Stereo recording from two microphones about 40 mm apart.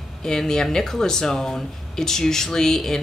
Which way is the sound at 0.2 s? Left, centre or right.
Centre.